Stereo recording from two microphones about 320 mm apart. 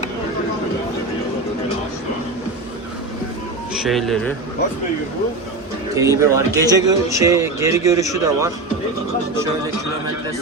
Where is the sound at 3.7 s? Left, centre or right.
Centre.